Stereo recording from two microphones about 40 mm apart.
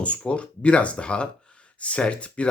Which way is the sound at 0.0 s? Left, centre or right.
Left.